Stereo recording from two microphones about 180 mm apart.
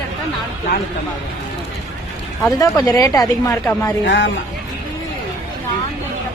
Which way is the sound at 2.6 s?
20° left (ahead or behind).